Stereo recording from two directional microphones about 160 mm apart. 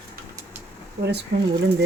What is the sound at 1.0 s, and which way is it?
Speech, 90° right.